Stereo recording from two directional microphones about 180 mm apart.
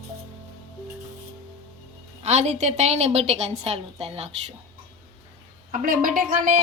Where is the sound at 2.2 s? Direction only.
40° right (ahead or behind).